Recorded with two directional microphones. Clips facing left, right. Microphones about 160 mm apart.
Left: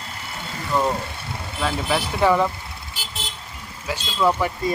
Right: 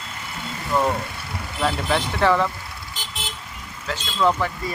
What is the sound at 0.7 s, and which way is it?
Speech, 5° right (ahead or behind).